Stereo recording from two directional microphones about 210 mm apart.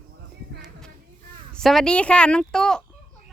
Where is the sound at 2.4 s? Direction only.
5° left (ahead or behind).